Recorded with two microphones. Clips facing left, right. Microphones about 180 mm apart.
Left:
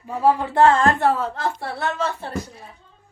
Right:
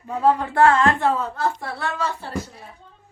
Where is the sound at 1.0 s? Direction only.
80° left.